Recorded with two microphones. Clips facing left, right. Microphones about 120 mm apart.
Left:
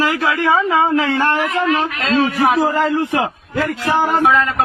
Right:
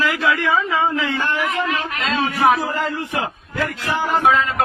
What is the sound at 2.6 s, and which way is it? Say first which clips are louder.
Speech: left 7 dB; 90° left.